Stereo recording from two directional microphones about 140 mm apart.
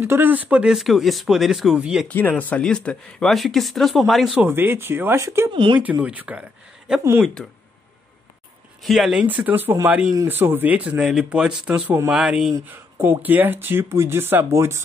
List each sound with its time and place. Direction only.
0.0 s speech: 15° right (ahead or behind)
2.0 s speech: 10° left (ahead or behind)
4.4 s speech: 15° right (ahead or behind)
5.5 s speech: 35° right (ahead or behind)
5.8 s speech: 10° right (ahead or behind)
8.8 s speech: centre (ahead or behind)
12.9 s speech: 15° right (ahead or behind)